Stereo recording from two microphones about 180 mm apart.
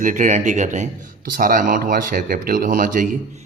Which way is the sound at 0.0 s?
45° right (ahead or behind).